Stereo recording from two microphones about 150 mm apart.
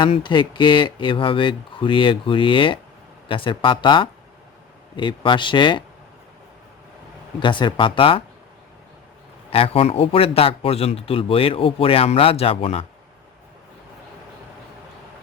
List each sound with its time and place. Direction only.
0.0 s a man's voice: 30° left (ahead or behind)
7.3 s a man's voice: 30° left (ahead or behind)
9.5 s a man's voice: 40° left (ahead or behind)